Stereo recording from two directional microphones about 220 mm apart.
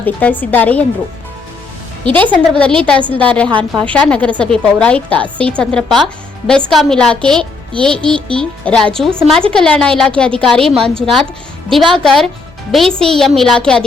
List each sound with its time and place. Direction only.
0.0 s a woman's voice: 10° left (ahead or behind)
2.3 s a child's voice: 5° left (ahead or behind)
3.5 s a woman's voice: 20° right (ahead or behind)
3.8 s a child's voice: 5° left (ahead or behind)